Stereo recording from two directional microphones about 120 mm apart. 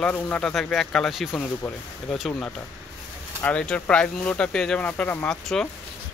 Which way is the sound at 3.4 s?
10° left (ahead or behind).